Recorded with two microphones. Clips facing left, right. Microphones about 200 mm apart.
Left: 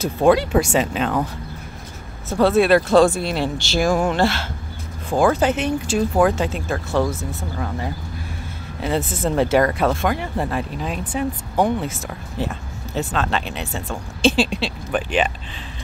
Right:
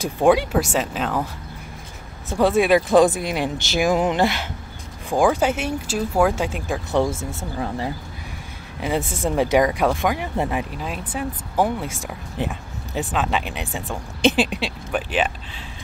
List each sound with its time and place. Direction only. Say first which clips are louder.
0.0 s speech: left 1 dB; 15° right (ahead or behind)
0.5 s speech: left 3 dB; centre (ahead or behind)
2.2 s speech: left 2 dB; 15° right (ahead or behind)
8.8 s speech: left 1 dB; 15° right (ahead or behind)
10.8 s speech: left 4 dB; 5° right (ahead or behind)